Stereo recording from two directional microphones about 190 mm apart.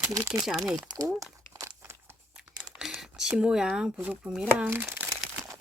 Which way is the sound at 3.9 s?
10° right (ahead or behind).